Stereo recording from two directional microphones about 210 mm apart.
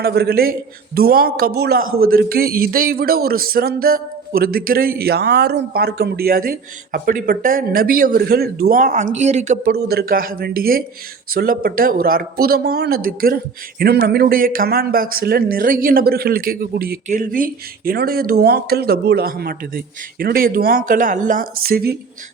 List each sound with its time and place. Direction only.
0.0 s a man's voice: 50° right (ahead or behind)